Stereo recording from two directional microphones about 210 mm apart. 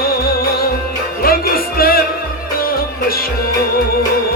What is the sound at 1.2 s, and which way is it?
Music, 45° left (ahead or behind).